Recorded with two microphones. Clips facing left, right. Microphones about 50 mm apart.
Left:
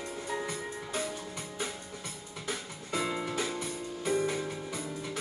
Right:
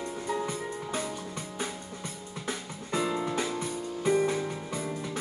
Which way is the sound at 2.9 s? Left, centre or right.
Centre.